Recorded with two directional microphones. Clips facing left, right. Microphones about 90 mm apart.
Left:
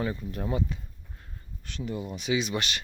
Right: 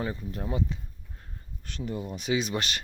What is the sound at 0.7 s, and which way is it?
Speech, 25° right (ahead or behind).